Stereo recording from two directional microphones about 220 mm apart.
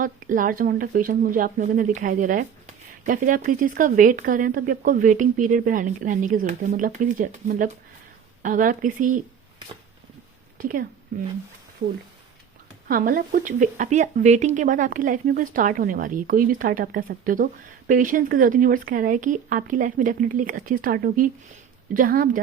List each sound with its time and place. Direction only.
0.0 s speech: 40° right (ahead or behind)
10.6 s a woman's voice: 40° right (ahead or behind)